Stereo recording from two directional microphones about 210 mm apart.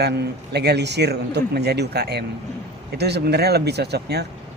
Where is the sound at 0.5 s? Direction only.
50° right (ahead or behind).